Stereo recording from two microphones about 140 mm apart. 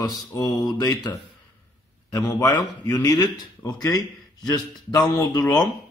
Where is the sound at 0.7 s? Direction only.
25° left (ahead or behind).